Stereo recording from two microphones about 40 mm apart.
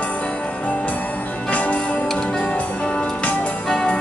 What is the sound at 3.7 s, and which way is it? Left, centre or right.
Music, centre.